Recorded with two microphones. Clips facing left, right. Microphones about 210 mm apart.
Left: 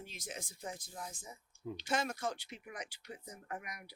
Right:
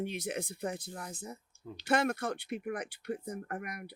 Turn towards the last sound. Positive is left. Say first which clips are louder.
# right 6 dB
turn(degrees=-55)  # may be behind; listen again after turning